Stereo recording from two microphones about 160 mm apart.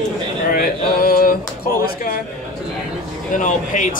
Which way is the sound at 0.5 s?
60° left (ahead or behind).